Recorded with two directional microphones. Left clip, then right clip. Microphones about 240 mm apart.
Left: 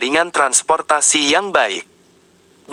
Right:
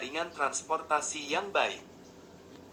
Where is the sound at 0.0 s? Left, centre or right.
Left.